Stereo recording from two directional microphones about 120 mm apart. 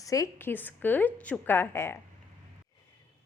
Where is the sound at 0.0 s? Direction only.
30° left (ahead or behind).